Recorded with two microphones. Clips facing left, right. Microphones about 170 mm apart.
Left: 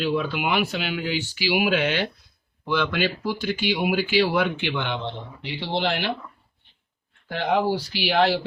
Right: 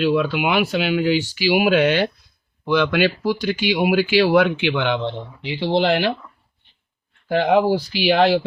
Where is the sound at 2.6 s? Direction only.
80° right.